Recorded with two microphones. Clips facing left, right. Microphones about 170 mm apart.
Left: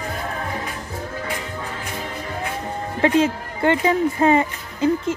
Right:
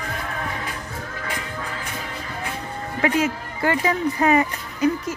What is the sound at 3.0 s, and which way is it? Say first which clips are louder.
Speech: left 4 dB; 25° left (ahead or behind).